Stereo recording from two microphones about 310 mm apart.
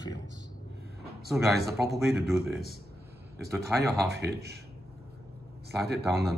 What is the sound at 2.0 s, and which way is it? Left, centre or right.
Speech, centre.